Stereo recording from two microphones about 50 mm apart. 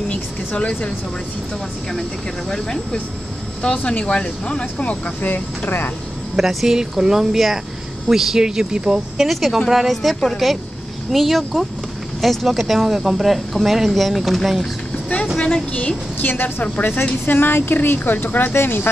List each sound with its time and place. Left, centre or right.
0.6 s speech: left
2.5 s speech: centre
3.7 s speech: left
6.3 s speech: centre
9.3 s speech: centre
15.3 s speech: centre
16.2 s a woman's voice: left
18.5 s speech: left